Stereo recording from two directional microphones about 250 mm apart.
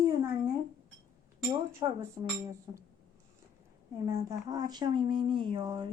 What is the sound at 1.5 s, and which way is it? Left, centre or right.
Speech, centre.